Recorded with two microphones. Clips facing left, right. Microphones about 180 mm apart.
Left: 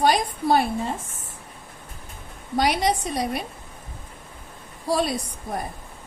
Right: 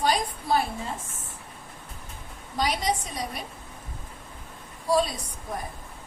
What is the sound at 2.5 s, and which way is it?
Speech, 70° left (ahead or behind).